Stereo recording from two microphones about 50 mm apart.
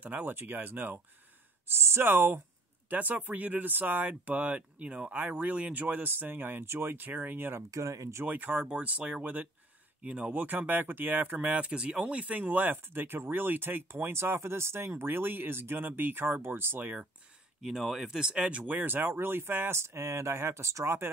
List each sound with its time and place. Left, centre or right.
0.0 s speech: right
1.7 s speech: right
2.9 s speech: right
6.0 s speech: right
6.9 s speech: right
7.7 s speech: right
8.3 s speech: right
8.6 s speech: right
10.4 s speech: right
11.3 s speech: right
14.9 s speech: right
17.6 s speech: centre
18.7 s speech: right
19.7 s speech: right